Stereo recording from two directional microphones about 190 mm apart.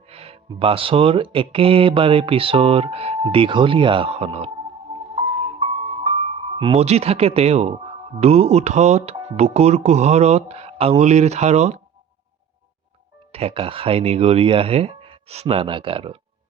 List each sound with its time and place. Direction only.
0.1 s speech: 30° right (ahead or behind)
13.3 s speech: 30° right (ahead or behind)